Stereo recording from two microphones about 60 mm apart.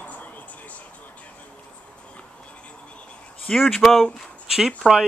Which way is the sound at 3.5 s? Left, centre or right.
Centre.